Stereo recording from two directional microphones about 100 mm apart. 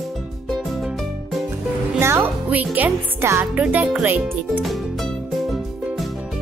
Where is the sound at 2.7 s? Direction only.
20° right (ahead or behind).